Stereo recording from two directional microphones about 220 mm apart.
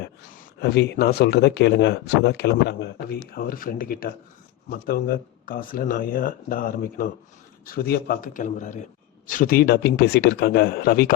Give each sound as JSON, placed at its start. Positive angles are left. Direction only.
{"t": 0.6, "sound": "speech", "side_deg": 50}